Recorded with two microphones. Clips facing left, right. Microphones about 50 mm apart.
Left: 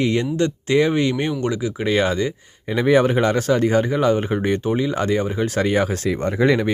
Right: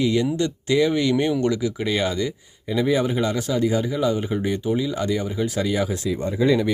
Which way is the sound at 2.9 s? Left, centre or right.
Left.